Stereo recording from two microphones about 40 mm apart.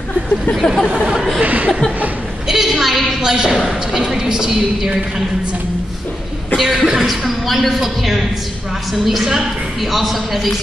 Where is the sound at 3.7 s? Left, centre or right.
Centre.